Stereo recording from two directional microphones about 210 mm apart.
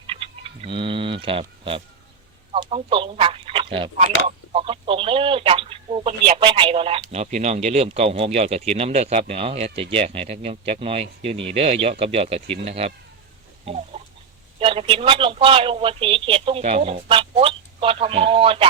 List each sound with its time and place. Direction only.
0.1 s a sound: 25° right (ahead or behind)
2.5 s speech: 30° right (ahead or behind)
13.7 s chicken: 30° right (ahead or behind)
14.6 s speech: 25° right (ahead or behind)